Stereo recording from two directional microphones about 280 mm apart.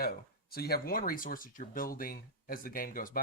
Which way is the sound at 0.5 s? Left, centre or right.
Left.